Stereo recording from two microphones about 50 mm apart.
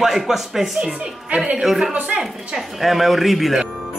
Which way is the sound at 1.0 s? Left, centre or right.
Right.